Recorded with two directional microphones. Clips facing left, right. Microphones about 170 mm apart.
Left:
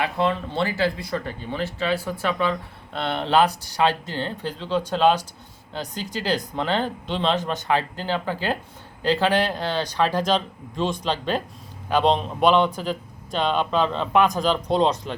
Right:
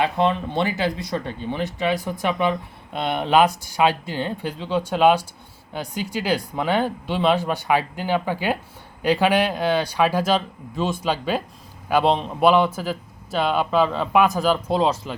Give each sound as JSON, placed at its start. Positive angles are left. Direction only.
{"t": 0.0, "sound": "a man's voice", "side_deg": -20}